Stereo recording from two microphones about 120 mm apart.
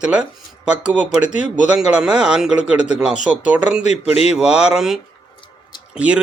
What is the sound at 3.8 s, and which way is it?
Speech, 65° left (ahead or behind).